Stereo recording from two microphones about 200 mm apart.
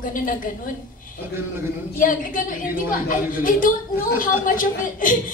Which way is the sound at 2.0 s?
45° left (ahead or behind).